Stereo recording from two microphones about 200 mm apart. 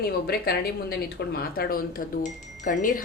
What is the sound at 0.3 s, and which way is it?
Speech, 50° left (ahead or behind).